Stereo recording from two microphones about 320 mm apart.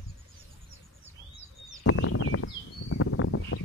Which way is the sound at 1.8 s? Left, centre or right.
Left.